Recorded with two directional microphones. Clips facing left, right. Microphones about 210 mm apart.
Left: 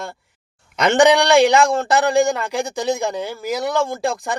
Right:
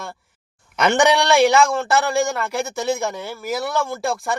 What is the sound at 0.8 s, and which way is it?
A man's voice, 15° left (ahead or behind).